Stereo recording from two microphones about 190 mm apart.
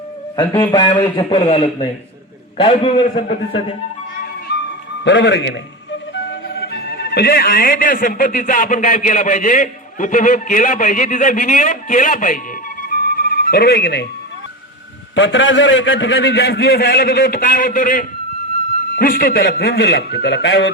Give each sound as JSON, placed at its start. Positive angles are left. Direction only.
{"t": 0.3, "sound": "a man's voice", "side_deg": 20}
{"t": 4.5, "sound": "music", "side_deg": 65}
{"t": 5.0, "sound": "a man's voice", "side_deg": 65}
{"t": 12.9, "sound": "music", "side_deg": 50}
{"t": 15.1, "sound": "a man's voice", "side_deg": 75}